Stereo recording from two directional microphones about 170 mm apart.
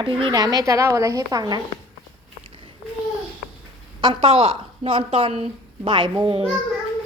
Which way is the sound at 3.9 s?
30° right (ahead or behind).